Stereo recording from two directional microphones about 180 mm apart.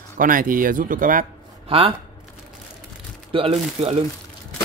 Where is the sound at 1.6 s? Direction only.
30° right (ahead or behind).